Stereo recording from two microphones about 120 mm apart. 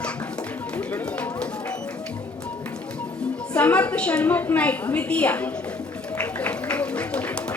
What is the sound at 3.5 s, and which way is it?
A woman's voice, 10° left (ahead or behind).